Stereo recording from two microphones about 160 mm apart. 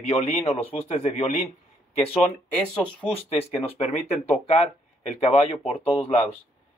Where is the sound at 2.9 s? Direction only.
35° left (ahead or behind).